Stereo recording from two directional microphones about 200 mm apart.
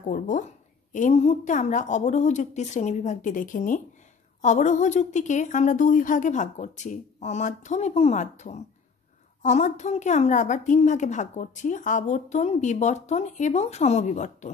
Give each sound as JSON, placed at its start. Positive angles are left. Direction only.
{"t": 0.1, "sound": "a woman's voice", "side_deg": 40}